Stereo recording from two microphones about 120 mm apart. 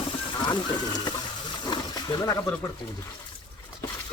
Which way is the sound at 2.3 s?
25° left (ahead or behind).